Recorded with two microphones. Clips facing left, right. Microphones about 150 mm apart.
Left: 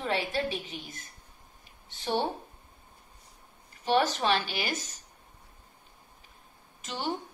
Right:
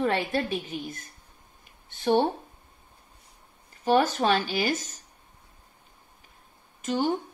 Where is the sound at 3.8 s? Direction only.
45° right (ahead or behind).